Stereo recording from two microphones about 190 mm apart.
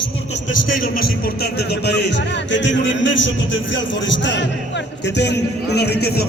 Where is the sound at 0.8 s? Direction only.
55° left (ahead or behind).